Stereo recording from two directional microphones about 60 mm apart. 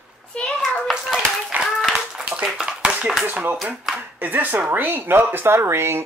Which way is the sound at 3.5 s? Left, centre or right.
Centre.